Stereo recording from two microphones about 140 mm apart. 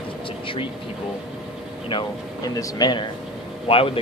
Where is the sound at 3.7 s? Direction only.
40° left (ahead or behind).